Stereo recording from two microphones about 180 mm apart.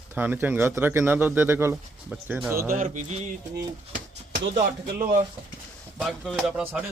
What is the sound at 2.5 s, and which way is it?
Speech, 15° right (ahead or behind).